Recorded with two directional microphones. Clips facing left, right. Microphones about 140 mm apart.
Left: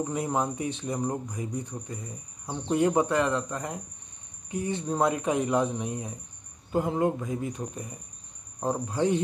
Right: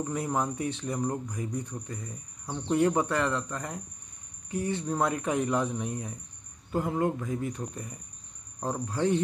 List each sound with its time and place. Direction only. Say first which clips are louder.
0.0 s speech: left 2 dB; 20° left (ahead or behind)